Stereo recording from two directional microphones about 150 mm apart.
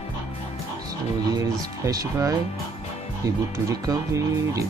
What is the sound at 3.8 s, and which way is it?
Speech, 20° right (ahead or behind).